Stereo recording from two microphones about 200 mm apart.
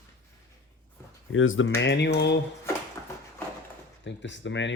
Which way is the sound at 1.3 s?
80° left.